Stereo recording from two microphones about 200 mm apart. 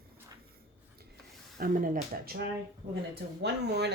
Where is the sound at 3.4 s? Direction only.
60° right (ahead or behind).